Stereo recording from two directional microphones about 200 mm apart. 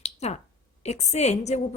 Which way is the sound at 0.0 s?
35° left (ahead or behind).